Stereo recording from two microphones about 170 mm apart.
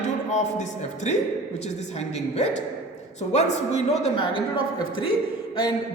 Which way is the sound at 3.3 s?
40° left (ahead or behind).